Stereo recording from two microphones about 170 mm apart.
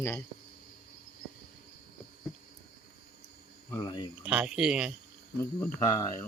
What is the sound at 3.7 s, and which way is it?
Speech, 25° left (ahead or behind).